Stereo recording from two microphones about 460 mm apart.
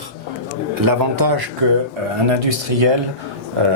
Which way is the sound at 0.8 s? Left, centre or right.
Right.